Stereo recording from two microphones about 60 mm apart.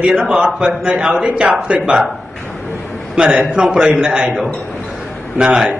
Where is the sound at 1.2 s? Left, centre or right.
Centre.